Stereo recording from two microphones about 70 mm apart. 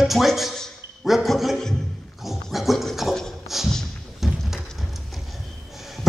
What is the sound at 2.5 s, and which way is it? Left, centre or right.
Dog, centre.